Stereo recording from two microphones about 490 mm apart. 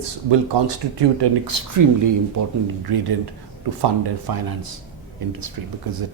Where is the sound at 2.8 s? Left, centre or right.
Right.